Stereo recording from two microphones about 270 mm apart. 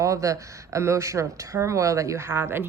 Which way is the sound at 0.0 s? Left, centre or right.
Centre.